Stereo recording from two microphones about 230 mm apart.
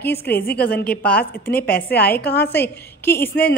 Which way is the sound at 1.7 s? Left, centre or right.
Left.